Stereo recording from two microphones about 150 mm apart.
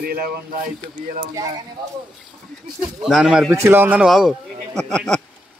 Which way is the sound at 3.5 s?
15° right (ahead or behind).